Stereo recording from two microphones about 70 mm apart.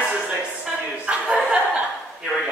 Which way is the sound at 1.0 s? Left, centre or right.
Centre.